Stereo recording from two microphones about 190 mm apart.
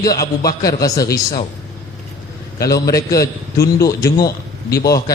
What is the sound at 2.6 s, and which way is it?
A man's voice, 20° left (ahead or behind).